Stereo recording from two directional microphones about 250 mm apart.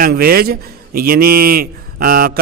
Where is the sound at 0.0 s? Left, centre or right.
Right.